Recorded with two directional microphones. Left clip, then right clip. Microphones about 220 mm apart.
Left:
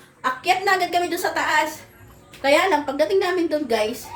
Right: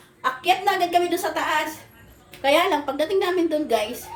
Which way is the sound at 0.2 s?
5° left (ahead or behind).